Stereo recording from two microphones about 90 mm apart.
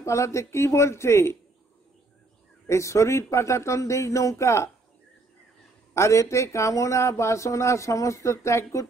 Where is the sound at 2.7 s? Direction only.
35° left (ahead or behind).